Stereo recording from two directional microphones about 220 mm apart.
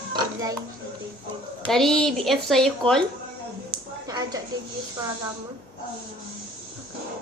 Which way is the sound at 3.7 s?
15° right (ahead or behind).